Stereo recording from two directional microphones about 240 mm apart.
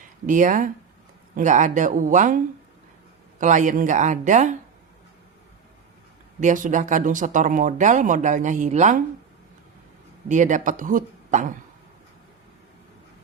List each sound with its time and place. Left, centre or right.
0.3 s speech: right
3.4 s speech: right
6.4 s speech: right
10.2 s speech: right